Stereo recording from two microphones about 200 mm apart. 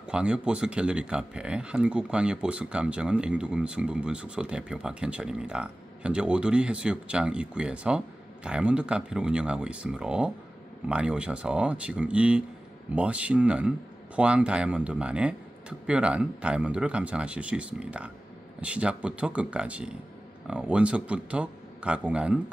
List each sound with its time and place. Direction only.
0.1 s speech: 5° right (ahead or behind)